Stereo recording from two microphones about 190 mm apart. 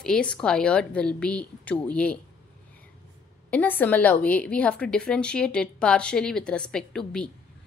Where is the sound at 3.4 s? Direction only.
10° left (ahead or behind).